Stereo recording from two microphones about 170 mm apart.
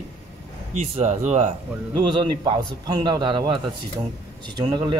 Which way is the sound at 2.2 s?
25° right (ahead or behind).